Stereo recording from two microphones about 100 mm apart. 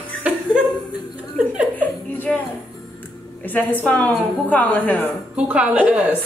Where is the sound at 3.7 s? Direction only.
15° left (ahead or behind).